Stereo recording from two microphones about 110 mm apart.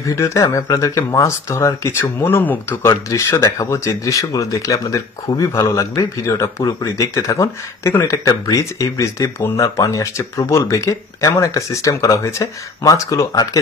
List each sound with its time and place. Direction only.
0.0 s speech: 30° left (ahead or behind)
2.9 s speech: 30° left (ahead or behind)